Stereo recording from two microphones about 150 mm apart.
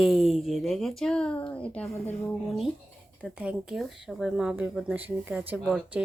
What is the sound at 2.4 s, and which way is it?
Speech, centre (ahead or behind).